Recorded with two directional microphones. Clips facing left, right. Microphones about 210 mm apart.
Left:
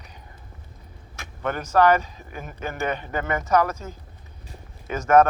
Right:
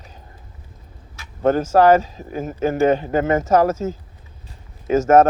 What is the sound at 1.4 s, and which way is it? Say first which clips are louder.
Speech: right 6 dB; 40° right (ahead or behind).